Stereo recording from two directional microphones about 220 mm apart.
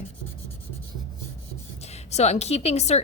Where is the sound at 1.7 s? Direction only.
30° left (ahead or behind).